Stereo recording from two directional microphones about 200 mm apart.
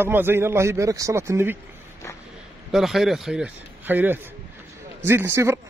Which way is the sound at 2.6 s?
Centre (ahead or behind).